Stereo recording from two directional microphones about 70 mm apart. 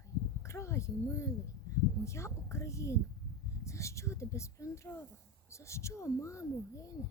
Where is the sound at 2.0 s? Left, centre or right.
Left.